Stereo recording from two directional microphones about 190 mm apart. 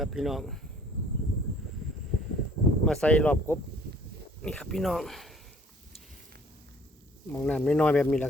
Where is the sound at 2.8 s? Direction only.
5° left (ahead or behind).